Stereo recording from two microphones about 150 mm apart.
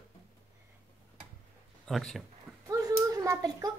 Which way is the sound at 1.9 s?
Centre (ahead or behind).